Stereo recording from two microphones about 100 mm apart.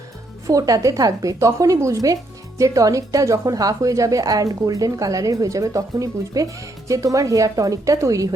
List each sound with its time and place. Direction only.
0.4 s a woman's voice: 35° right (ahead or behind)